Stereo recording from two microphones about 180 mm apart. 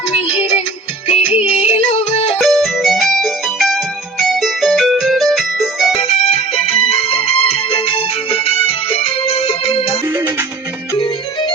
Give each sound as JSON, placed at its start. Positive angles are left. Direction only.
{"t": 0.1, "sound": "music", "side_deg": 35}
{"t": 2.4, "sound": "music", "side_deg": 0}
{"t": 6.0, "sound": "music", "side_deg": 35}
{"t": 10.1, "sound": "music", "side_deg": -10}
{"t": 10.9, "sound": "music", "side_deg": 30}